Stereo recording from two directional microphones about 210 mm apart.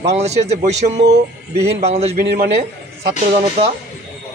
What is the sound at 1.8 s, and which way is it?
Speech, 30° right (ahead or behind).